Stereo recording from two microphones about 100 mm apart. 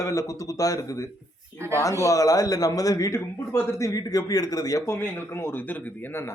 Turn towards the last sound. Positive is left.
turn(degrees=20)  # may be behind; listen again after turning